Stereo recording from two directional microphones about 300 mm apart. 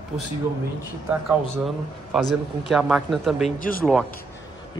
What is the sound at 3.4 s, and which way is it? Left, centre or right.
Speech, left.